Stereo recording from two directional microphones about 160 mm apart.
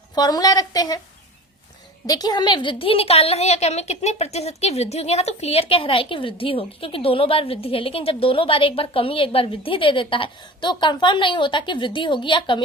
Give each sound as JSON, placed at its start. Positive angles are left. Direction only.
{"t": 0.1, "sound": "a woman's voice", "side_deg": 25}
{"t": 2.0, "sound": "a woman's voice", "side_deg": 25}